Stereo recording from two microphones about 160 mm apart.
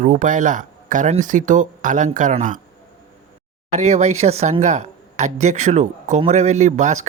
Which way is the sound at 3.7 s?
45° right (ahead or behind).